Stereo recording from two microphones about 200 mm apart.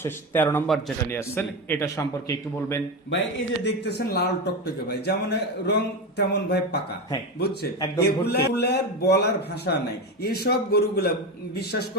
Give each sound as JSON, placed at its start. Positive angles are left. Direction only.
{"t": 0.0, "sound": "a man's voice", "side_deg": 10}
{"t": 3.6, "sound": "a man's voice", "side_deg": 60}